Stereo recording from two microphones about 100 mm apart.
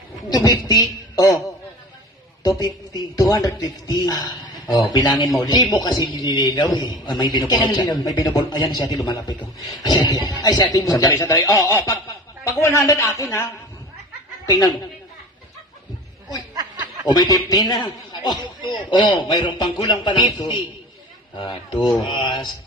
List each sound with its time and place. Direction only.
0.3 s speech: 40° left (ahead or behind)
2.6 s a man's voice: 40° left (ahead or behind)
14.4 s a woman's voice: 40° left (ahead or behind)
17.1 s a man's voice: 40° left (ahead or behind)
21.3 s a man's voice: 50° left (ahead or behind)